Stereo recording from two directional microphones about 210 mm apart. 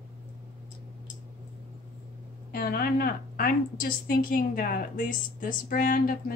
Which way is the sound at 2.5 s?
45° left (ahead or behind).